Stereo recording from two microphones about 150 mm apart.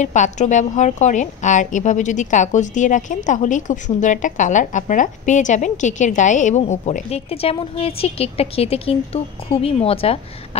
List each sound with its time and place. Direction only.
0.0 s a woman's voice: 55° left (ahead or behind)